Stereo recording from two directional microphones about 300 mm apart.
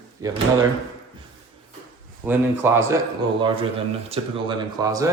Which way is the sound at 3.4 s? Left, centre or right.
Centre.